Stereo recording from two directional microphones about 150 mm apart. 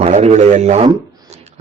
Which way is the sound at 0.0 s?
50° right (ahead or behind).